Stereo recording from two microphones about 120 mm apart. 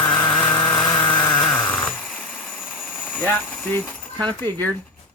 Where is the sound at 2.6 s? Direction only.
15° left (ahead or behind).